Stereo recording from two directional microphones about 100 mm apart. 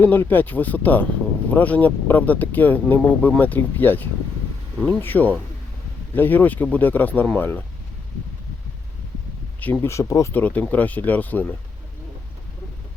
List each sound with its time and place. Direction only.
0.0 s speech: 20° left (ahead or behind)
9.8 s speech: 30° left (ahead or behind)
10.3 s speech: 15° left (ahead or behind)